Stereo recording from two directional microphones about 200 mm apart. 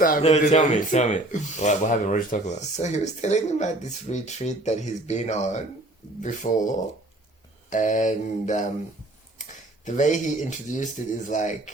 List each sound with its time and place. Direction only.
0.2 s speech: 30° left (ahead or behind)